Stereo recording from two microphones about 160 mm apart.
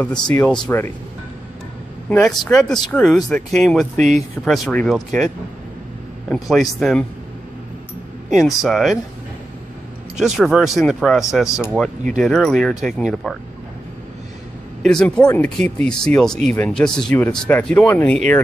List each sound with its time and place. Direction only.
0.0 s speech: 5° left (ahead or behind)
2.0 s speech: 5° left (ahead or behind)
3.9 s speech: 50° right (ahead or behind)
4.5 s speech: 5° left (ahead or behind)
8.3 s speech: centre (ahead or behind)
10.1 s speech: 5° right (ahead or behind)
14.8 s speech: 5° left (ahead or behind)